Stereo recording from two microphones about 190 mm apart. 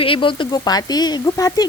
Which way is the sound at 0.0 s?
25° left (ahead or behind).